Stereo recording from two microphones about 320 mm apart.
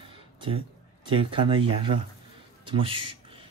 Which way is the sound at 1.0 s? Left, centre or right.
Centre.